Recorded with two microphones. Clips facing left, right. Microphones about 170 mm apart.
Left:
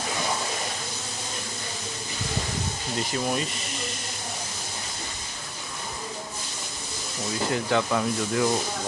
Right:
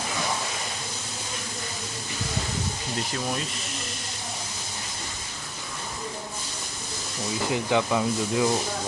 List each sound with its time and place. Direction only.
3.1 s speech: 5° left (ahead or behind)
7.5 s speech: 10° right (ahead or behind)